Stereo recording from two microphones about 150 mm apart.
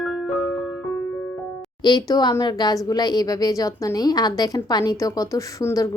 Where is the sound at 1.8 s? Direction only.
25° left (ahead or behind).